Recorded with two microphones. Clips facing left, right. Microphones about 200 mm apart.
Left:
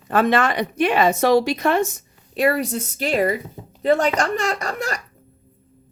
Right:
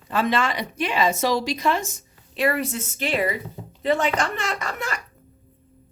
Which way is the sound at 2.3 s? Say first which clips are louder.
Left 4 dB; 40° left (ahead or behind).